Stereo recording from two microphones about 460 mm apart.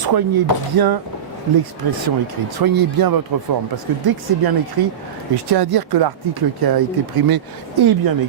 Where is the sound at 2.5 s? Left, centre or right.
Right.